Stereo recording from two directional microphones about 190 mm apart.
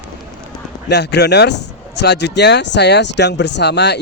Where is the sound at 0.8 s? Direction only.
60° left (ahead or behind).